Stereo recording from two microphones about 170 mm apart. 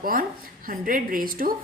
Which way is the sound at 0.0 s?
55° right (ahead or behind).